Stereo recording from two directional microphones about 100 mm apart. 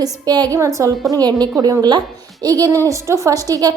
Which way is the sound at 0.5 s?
30° right (ahead or behind).